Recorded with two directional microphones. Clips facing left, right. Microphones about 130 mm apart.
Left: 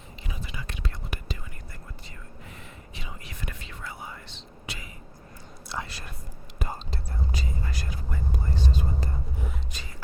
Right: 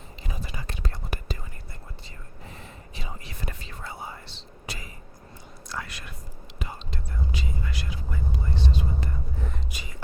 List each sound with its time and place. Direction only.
0.3 s whispering: 40° right (ahead or behind)
2.9 s whispering: 35° right (ahead or behind)
5.6 s whispering: 25° left (ahead or behind); by 9.0 s 45° left (ahead or behind)
9.7 s music: 10° right (ahead or behind)